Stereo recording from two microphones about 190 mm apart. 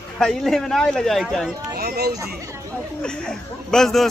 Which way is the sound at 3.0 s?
5° left (ahead or behind).